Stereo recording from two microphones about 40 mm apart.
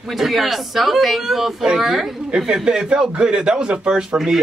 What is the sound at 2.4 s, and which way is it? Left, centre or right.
A man's voice, centre.